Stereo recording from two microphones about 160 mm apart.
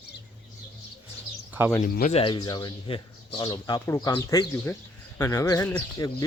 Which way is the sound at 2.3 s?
25° left (ahead or behind).